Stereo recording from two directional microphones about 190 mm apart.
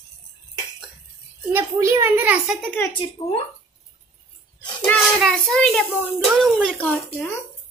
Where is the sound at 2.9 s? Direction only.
30° left (ahead or behind).